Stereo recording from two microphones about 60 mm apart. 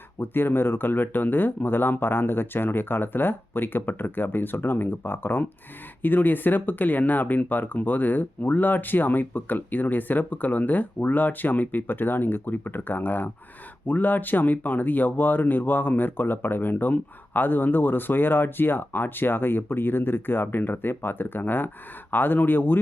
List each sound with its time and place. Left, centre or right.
0.2 s speech: left